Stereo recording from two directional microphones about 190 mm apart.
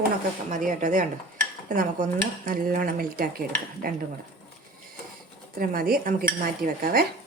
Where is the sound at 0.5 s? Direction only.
40° right (ahead or behind).